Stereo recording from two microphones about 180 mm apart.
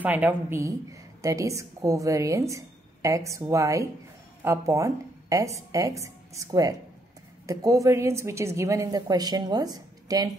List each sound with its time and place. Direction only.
0.0 s a woman's voice: 10° right (ahead or behind)